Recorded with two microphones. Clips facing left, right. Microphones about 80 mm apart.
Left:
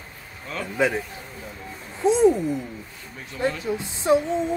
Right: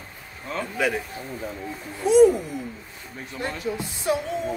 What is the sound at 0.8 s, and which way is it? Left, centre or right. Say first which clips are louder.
Speech: left 3 dB; left.